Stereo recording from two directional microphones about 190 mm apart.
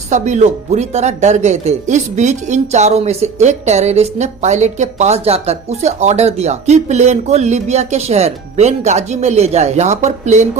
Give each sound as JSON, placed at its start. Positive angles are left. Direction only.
{"t": 0.1, "sound": "speech", "side_deg": -40}